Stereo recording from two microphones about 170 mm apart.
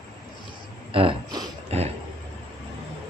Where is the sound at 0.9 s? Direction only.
30° right (ahead or behind).